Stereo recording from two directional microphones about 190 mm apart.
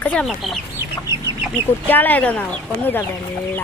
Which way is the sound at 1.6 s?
10° left (ahead or behind).